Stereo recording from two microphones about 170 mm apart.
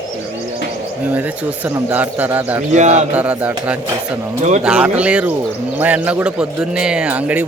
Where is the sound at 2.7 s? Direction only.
45° right (ahead or behind).